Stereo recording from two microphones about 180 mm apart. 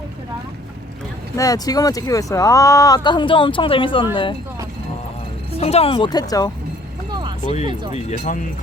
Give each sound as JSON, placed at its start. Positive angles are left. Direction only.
{"t": 1.4, "sound": "speech", "side_deg": 20}
{"t": 5.5, "sound": "speech", "side_deg": 35}
{"t": 7.1, "sound": "a sound", "side_deg": -25}
{"t": 7.6, "sound": "speech", "side_deg": -25}
{"t": 8.1, "sound": "speech", "side_deg": 45}